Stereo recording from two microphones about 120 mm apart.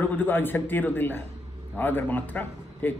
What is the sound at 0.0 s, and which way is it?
A man's voice, 15° left (ahead or behind).